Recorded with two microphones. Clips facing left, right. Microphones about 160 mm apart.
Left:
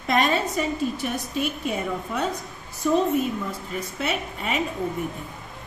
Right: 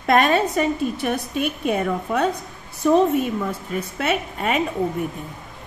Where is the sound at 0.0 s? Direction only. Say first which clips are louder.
Right 5 dB; 60° right (ahead or behind).